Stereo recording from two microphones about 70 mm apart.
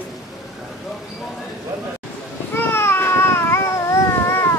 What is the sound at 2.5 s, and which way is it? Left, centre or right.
Baby cry, left.